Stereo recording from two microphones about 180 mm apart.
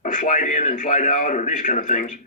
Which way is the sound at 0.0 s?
45° left (ahead or behind).